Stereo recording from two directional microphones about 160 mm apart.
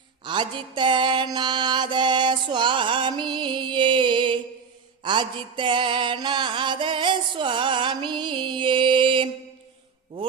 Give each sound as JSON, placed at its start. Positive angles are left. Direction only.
{"t": 0.3, "sound": "mantra", "side_deg": -30}